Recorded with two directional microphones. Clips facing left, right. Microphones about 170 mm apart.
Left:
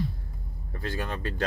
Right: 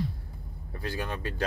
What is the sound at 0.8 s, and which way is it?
Speech, 15° right (ahead or behind).